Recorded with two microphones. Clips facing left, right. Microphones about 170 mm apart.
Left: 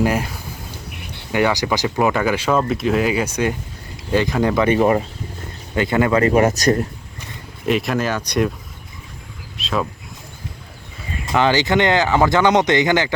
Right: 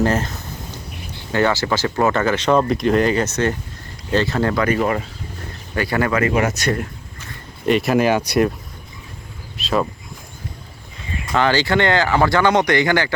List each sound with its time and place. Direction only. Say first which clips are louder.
0.0 s speech: even; 10° left (ahead or behind)
4.6 s speech: left 3 dB; 25° left (ahead or behind)
6.2 s speech: left 4 dB; 35° left (ahead or behind)
7.6 s speech: right 2 dB; centre (ahead or behind)
7.9 s speech: right 4 dB; 10° right (ahead or behind)
9.6 s speech: right 3 dB; centre (ahead or behind)
11.3 s speech: left 1 dB; 20° left (ahead or behind)